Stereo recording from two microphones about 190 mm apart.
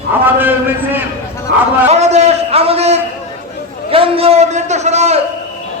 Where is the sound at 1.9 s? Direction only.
35° right (ahead or behind).